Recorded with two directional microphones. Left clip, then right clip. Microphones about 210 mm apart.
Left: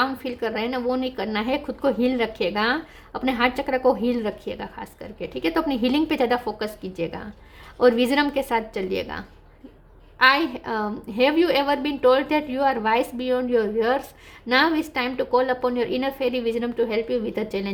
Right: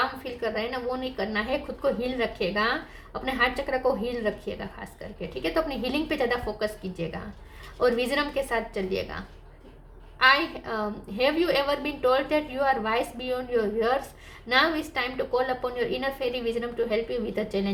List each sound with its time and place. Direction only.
0.0 s a woman's voice: 45° left (ahead or behind)